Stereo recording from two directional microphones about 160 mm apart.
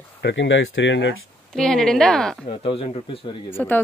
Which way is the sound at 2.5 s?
40° left (ahead or behind).